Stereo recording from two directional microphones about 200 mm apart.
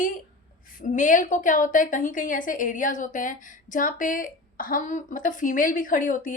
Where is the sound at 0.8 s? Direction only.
40° left (ahead or behind).